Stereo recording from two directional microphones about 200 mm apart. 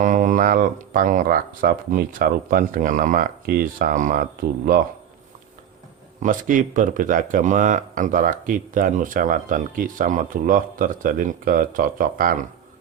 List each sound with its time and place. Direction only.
0.0 s speech: 40° right (ahead or behind)
6.2 s speech: 40° right (ahead or behind)